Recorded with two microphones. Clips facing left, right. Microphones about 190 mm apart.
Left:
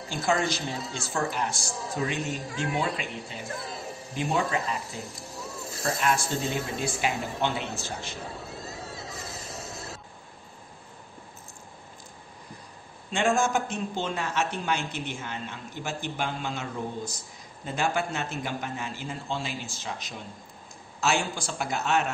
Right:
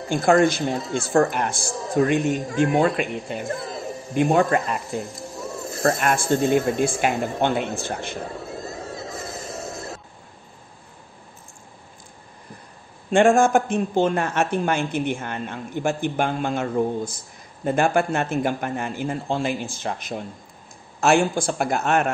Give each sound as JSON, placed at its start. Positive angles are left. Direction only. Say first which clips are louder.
{"t": 0.1, "sound": "a man's voice", "louder": "right 10 dB", "side_deg": -55}
{"t": 8.9, "sound": "music", "louder": "right 7 dB", "side_deg": -50}
{"t": 13.1, "sound": "a man's voice", "louder": "right 9 dB", "side_deg": -55}